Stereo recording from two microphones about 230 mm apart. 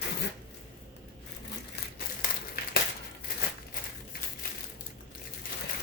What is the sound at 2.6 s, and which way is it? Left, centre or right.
Crumpling, left.